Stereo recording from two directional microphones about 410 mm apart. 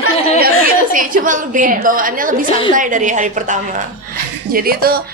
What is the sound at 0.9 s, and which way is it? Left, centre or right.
A woman's voice, centre.